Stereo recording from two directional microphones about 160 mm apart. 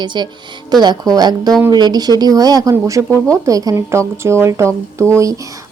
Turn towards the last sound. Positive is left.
turn(degrees=-20)  # may be behind; listen again after turning